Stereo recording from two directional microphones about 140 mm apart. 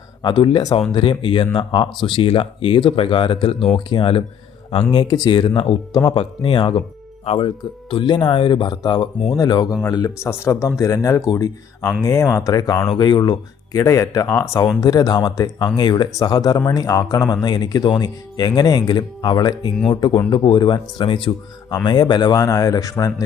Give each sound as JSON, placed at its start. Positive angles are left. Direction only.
{"t": 0.2, "sound": "speech", "side_deg": 35}